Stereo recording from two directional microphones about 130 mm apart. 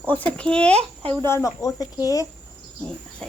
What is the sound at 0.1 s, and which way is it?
Speech, 10° left (ahead or behind).